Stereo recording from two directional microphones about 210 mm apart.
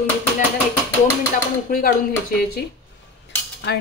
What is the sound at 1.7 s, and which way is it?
Speech, 45° left (ahead or behind).